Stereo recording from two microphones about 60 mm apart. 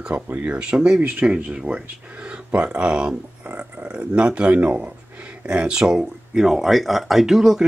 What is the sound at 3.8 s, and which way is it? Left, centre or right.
Speech, centre.